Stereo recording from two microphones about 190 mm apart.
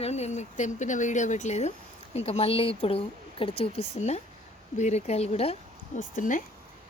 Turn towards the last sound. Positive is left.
turn(degrees=45)  # may be behind; listen again after turning